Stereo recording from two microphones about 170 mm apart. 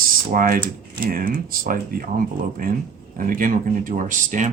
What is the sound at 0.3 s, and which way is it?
Speech, 55° right (ahead or behind).